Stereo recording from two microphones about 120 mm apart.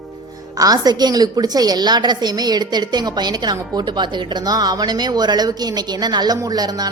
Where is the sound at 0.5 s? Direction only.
30° right (ahead or behind).